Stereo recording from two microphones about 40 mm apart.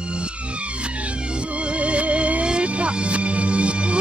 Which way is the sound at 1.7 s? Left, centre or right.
Right.